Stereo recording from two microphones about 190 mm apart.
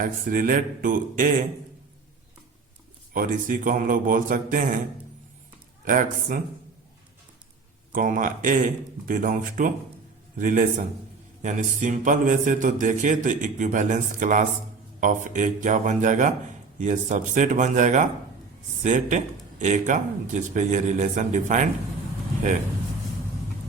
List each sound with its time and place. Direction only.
0.0 s a man's voice: 45° right (ahead or behind)
3.1 s a man's voice: 45° right (ahead or behind)
5.8 s a man's voice: 45° right (ahead or behind)
7.9 s a man's voice: 45° right (ahead or behind)